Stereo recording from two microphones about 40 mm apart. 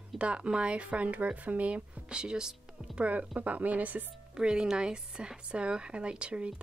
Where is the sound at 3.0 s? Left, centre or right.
Right.